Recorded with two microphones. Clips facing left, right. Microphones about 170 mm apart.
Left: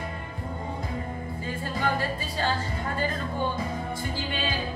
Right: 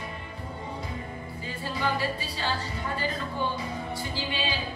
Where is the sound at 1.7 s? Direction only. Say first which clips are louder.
Even; 50° left (ahead or behind).